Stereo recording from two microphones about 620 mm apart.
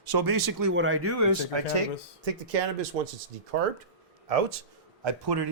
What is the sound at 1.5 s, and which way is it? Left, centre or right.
Speech, right.